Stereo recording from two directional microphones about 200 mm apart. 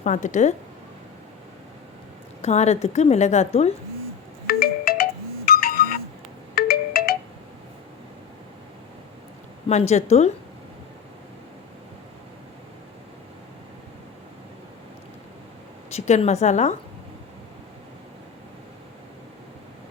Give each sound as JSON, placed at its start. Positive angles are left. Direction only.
{"t": 0.0, "sound": "a woman's voice", "side_deg": 40}
{"t": 2.4, "sound": "a woman's voice", "side_deg": 35}
{"t": 4.4, "sound": "music", "side_deg": 50}
{"t": 5.5, "sound": "a sound", "side_deg": 45}
{"t": 6.5, "sound": "marimba", "side_deg": 50}
{"t": 9.9, "sound": "a woman's voice", "side_deg": 35}
{"t": 15.9, "sound": "a woman's voice", "side_deg": 35}